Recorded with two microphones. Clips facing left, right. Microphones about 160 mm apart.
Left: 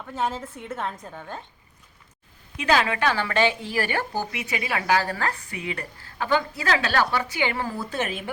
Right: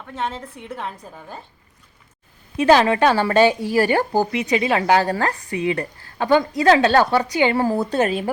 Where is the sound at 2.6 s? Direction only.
35° right (ahead or behind).